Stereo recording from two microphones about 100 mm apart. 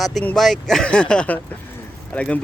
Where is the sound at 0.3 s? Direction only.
5° left (ahead or behind).